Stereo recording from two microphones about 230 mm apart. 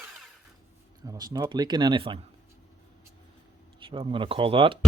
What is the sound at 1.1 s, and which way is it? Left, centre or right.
Speech, centre.